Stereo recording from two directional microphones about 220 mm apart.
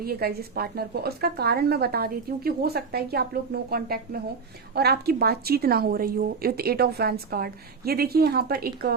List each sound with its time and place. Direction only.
0.0 s a woman's voice: 45° right (ahead or behind)